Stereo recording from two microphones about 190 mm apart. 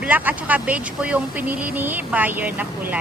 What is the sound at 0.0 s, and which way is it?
Speech, 10° right (ahead or behind).